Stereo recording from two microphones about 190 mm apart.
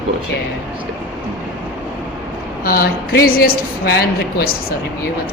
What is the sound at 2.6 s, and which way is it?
A woman's voice, 50° left (ahead or behind).